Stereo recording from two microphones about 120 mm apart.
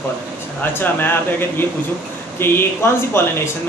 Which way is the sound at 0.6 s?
15° left (ahead or behind).